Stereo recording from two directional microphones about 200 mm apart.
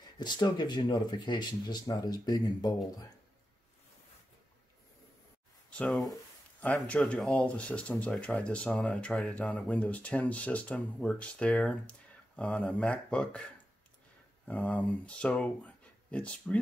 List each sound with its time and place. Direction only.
0.2 s speech: 20° left (ahead or behind)
5.7 s speech: 5° left (ahead or behind)
14.5 s speech: 5° left (ahead or behind)